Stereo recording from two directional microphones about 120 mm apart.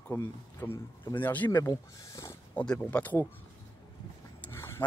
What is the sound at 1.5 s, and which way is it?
Speech, 25° left (ahead or behind).